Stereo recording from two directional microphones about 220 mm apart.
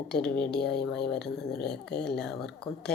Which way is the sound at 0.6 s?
50° left (ahead or behind).